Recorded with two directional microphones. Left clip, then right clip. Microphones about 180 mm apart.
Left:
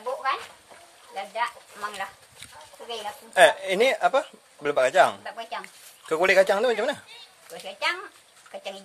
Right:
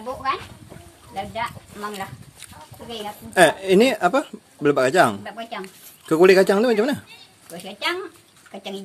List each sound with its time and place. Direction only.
1.1 s speech: 5° left (ahead or behind)
3.3 s speech: 20° right (ahead or behind)
5.2 s speech: 5° right (ahead or behind)
5.6 s a woman's voice: 15° right (ahead or behind)
7.6 s speech: centre (ahead or behind)